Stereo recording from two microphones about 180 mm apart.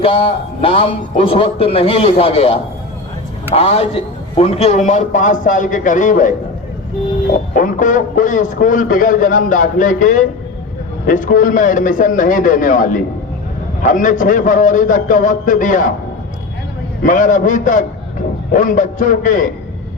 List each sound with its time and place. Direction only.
0.0 s a man's voice: 30° left (ahead or behind)
7.5 s a man's voice: 45° left (ahead or behind)
17.0 s a man's voice: 45° left (ahead or behind)